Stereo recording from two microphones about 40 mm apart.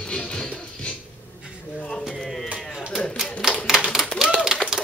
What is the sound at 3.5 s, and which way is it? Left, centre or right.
Typewriter, centre.